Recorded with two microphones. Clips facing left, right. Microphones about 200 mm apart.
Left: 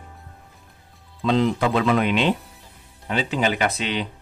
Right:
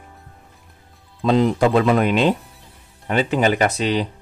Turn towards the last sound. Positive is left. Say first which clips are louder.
# right 5 dB
turn(degrees=-40)  # may be behind; listen again after turning